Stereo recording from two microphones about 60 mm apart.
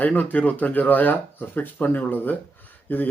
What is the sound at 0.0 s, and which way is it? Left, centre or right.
Speech, left.